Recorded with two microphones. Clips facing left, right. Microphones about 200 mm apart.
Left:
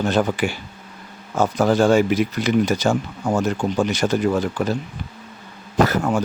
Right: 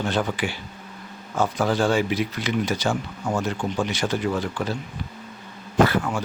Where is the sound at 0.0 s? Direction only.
45° left (ahead or behind).